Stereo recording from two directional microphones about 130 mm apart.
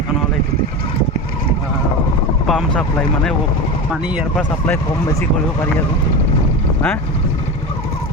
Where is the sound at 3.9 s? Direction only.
10° right (ahead or behind).